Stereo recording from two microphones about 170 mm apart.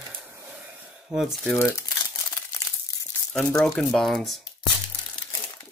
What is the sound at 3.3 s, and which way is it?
Speech, 5° left (ahead or behind).